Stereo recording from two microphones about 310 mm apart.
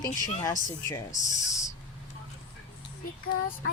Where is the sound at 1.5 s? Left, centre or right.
Centre.